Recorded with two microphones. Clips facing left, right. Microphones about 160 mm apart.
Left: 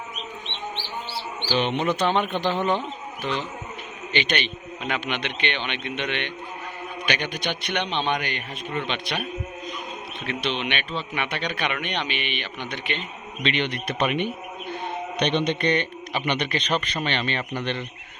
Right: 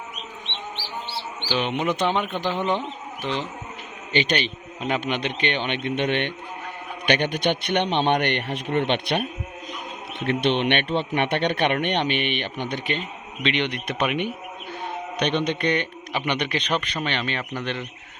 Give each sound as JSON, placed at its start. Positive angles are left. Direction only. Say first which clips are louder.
{"t": 1.7, "sound": "a man's voice", "louder": "right 1 dB", "side_deg": -15}
{"t": 4.1, "sound": "a man's voice", "louder": "right 3 dB", "side_deg": -35}
{"t": 8.9, "sound": "a man's voice", "louder": "right 6 dB", "side_deg": -55}
{"t": 10.2, "sound": "a man's voice", "louder": "right 7 dB", "side_deg": -55}
{"t": 13.4, "sound": "a man's voice", "louder": "right 1 dB", "side_deg": -15}